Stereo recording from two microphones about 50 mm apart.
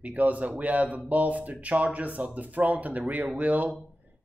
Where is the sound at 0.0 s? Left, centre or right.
Right.